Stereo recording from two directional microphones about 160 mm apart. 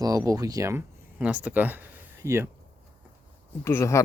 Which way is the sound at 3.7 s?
15° left (ahead or behind).